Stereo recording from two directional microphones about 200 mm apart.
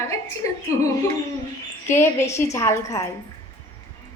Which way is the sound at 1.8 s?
10° left (ahead or behind).